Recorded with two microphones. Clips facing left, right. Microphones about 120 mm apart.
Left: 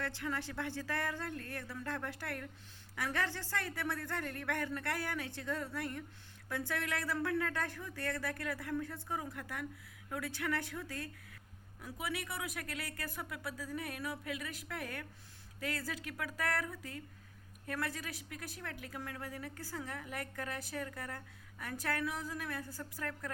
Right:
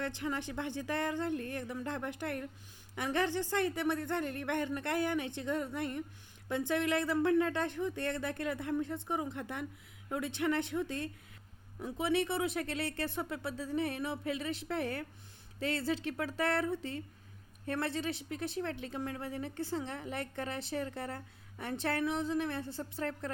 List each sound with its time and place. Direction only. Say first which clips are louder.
0.0 s speech: right 3 dB; 20° right (ahead or behind)